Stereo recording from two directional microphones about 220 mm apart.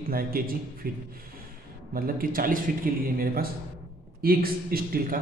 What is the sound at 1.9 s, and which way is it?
Speech, 40° right (ahead or behind).